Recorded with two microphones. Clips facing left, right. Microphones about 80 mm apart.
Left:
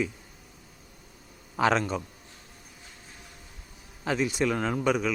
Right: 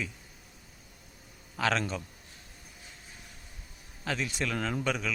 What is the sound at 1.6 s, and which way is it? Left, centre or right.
Speech, centre.